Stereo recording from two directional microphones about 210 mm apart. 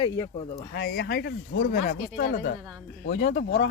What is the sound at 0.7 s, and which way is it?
Speech, 55° left (ahead or behind).